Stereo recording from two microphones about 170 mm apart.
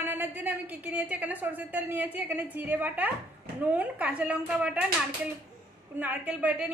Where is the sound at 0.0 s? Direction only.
10° right (ahead or behind).